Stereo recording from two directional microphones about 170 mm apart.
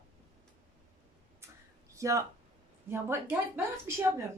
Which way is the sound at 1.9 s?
20° right (ahead or behind).